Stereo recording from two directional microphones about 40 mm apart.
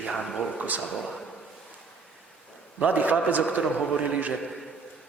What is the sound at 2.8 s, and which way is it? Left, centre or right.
Speech, right.